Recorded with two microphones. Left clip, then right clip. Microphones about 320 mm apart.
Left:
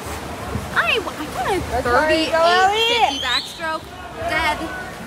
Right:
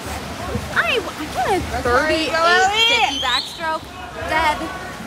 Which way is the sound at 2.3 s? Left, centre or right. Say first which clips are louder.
Right 1 dB; left.